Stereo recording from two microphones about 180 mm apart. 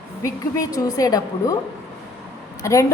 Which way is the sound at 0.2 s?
20° left (ahead or behind).